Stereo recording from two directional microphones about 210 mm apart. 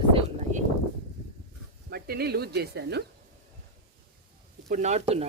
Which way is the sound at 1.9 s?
50° right (ahead or behind).